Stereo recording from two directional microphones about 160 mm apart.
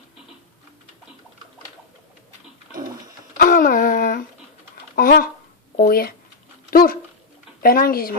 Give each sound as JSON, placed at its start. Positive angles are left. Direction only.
{"t": 3.3, "sound": "a sound", "side_deg": 60}
{"t": 6.7, "sound": "dog", "side_deg": 65}
{"t": 7.6, "sound": "speech", "side_deg": 65}